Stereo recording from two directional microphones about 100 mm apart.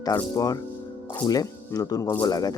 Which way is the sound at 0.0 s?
40° left (ahead or behind).